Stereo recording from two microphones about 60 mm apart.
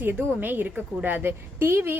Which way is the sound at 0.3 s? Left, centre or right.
Right.